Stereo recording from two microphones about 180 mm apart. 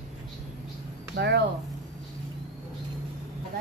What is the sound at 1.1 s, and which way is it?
Speech, 70° right (ahead or behind).